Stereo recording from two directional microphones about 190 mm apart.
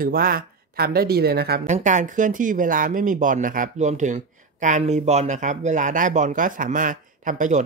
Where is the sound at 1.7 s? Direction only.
40° right (ahead or behind).